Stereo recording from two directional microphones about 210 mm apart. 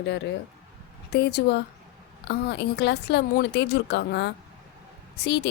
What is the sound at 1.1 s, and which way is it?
A woman's voice, 55° left (ahead or behind).